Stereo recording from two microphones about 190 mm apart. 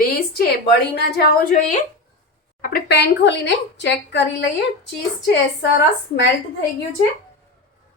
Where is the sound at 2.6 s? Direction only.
55° left (ahead or behind).